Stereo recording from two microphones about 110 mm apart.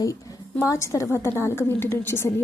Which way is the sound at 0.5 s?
25° left (ahead or behind).